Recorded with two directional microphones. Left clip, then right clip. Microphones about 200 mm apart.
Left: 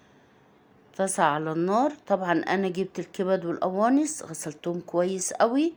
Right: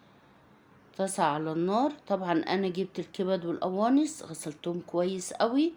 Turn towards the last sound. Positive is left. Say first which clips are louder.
# left 4 dB
turn(degrees=25)  # may be behind; listen again after turning